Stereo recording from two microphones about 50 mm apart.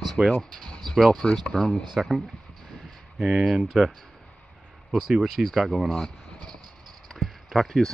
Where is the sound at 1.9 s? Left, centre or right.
Centre.